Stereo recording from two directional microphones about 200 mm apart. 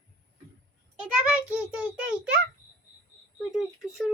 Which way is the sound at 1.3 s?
5° right (ahead or behind).